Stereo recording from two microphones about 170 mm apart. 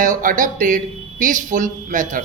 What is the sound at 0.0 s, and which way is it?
A man's voice, 50° right (ahead or behind).